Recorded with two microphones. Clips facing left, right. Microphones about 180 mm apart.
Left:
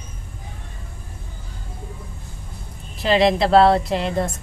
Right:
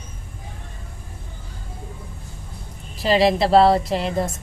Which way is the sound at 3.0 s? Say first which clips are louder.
Even; centre (ahead or behind).